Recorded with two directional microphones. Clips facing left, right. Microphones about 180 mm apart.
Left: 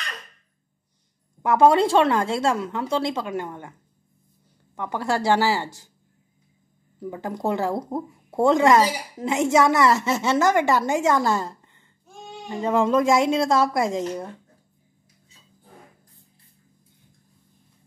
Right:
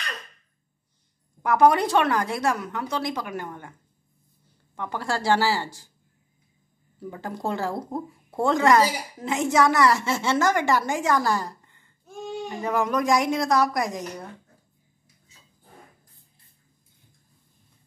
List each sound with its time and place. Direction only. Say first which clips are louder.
1.4 s a woman's voice: left 2 dB; 25° left (ahead or behind)
4.7 s a woman's voice: left 4 dB; 20° left (ahead or behind)
7.0 s a woman's voice: left 3 dB; 20° left (ahead or behind)